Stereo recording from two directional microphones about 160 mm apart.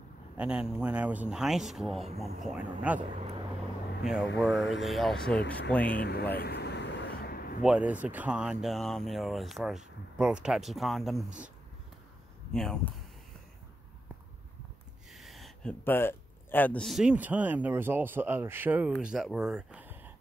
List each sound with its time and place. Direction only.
0.4 s speech: 5° right (ahead or behind)
2.0 s speech: 40° right (ahead or behind)
2.4 s speech: 5° right (ahead or behind)
4.0 s speech: 5° right (ahead or behind)
5.9 s speech: 90° left
6.3 s a sound: 85° left; by 7.5 s 70° left (ahead or behind)
7.6 s speech: 10° right (ahead or behind)
12.5 s speech: 5° left (ahead or behind)
15.1 s a sound: centre (ahead or behind)
15.8 s speech: 15° left (ahead or behind); by 20.1 s 10° right (ahead or behind)